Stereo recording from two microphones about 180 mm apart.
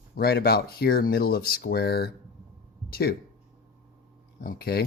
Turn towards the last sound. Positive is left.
turn(degrees=60)  # may be behind; listen again after turning